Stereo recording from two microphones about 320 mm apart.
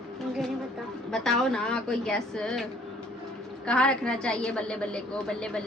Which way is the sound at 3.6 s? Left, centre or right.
Centre.